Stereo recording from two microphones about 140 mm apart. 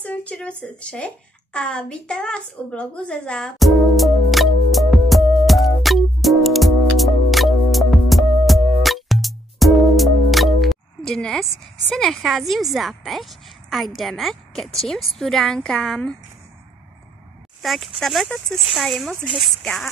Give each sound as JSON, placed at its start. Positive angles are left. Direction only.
{"t": 0.0, "sound": "a sound", "side_deg": 10}
{"t": 11.9, "sound": "a woman's voice", "side_deg": 0}
{"t": 17.6, "sound": "a woman's voice", "side_deg": 0}